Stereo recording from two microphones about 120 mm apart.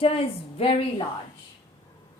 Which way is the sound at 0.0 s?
50° left (ahead or behind).